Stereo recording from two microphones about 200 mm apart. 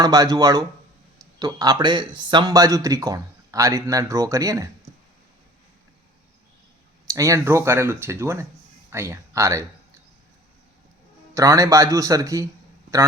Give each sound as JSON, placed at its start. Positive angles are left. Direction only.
{"t": 0.0, "sound": "speech", "side_deg": -20}
{"t": 7.1, "sound": "speech", "side_deg": -15}
{"t": 11.3, "sound": "speech", "side_deg": -15}